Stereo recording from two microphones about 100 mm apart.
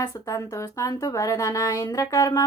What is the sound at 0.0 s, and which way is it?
Speech, 35° left (ahead or behind).